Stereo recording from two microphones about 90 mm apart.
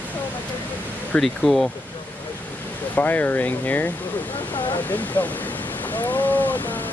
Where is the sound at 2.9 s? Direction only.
20° left (ahead or behind).